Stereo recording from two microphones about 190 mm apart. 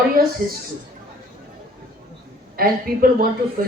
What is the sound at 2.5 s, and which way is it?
Speech, 50° right (ahead or behind).